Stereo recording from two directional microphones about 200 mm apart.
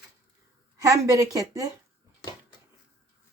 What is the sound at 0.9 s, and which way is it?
Speech, 15° right (ahead or behind).